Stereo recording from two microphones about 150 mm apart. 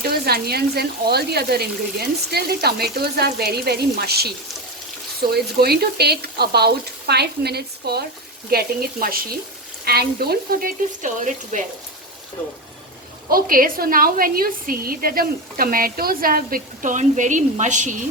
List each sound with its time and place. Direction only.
0.0 s speech: 90° right
5.3 s speech: 90° right
9.8 s a woman's voice: 90° right; by 11.6 s 60° right (ahead or behind)
13.3 s a woman's voice: 75° right (ahead or behind); by 17.9 s 55° right (ahead or behind)